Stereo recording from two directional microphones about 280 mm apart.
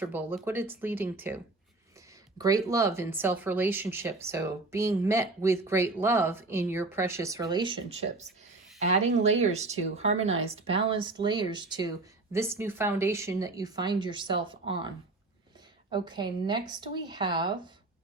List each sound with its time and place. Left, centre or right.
0.0 s speech: centre
2.4 s speech: centre
15.9 s speech: centre